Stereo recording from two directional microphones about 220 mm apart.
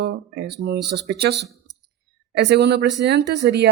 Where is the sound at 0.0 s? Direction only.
50° right (ahead or behind).